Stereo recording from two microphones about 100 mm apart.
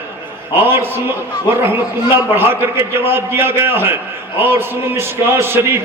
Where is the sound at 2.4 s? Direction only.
20° right (ahead or behind).